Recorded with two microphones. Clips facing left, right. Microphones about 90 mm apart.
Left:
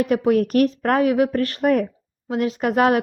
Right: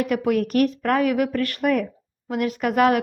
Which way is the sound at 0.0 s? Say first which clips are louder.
Left 3 dB; 35° left (ahead or behind).